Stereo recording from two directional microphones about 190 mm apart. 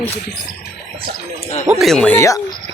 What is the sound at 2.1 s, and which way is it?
Speech, 15° left (ahead or behind).